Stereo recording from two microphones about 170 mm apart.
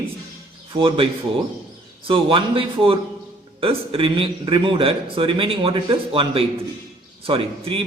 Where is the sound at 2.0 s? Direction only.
30° right (ahead or behind).